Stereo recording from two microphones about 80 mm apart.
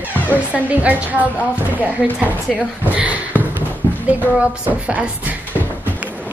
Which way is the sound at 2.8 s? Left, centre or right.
Centre.